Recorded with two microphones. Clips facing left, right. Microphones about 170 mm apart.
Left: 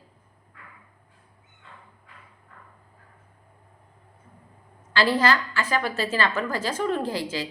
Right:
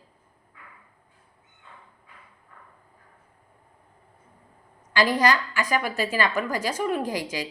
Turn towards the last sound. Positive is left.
turn(degrees=-15)  # may be behind; listen again after turning